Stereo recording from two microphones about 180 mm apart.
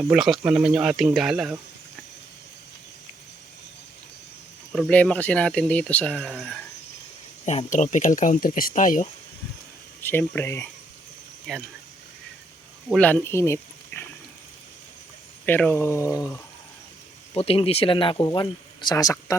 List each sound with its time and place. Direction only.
0.1 s speech: 5° right (ahead or behind)
4.7 s speech: 5° left (ahead or behind)
7.4 s speech: 40° left (ahead or behind)
10.0 s speech: 10° left (ahead or behind)
11.5 s speech: 5° left (ahead or behind)
13.0 s speech: 10° left (ahead or behind)
15.4 s speech: 10° left (ahead or behind)
17.3 s speech: 35° left (ahead or behind)